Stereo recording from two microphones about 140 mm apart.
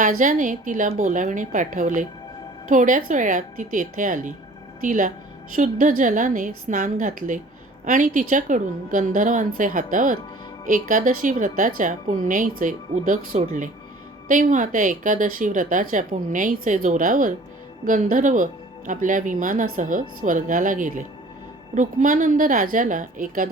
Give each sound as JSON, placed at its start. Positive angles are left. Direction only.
{"t": 0.0, "sound": "speech", "side_deg": -70}